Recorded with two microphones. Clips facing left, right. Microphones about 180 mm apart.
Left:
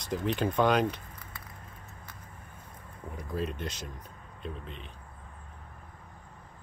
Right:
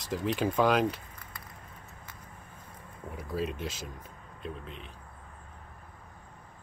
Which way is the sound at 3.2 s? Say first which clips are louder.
Right 1 dB; 5° right (ahead or behind).